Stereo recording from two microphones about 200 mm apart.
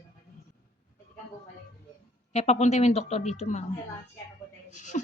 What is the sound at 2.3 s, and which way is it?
A woman's voice, 35° left (ahead or behind).